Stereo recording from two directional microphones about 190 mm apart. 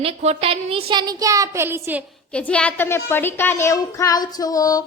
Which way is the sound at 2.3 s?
5° left (ahead or behind).